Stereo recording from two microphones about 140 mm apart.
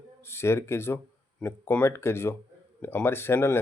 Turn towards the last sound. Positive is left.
turn(degrees=15)  # may be behind; listen again after turning